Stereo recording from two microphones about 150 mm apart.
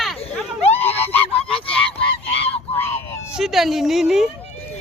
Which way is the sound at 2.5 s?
15° left (ahead or behind).